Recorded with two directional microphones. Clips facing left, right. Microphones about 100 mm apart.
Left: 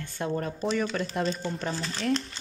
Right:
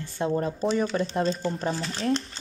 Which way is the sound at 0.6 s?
30° right (ahead or behind).